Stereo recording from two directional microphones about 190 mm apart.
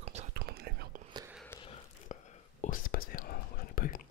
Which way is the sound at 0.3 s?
55° right (ahead or behind).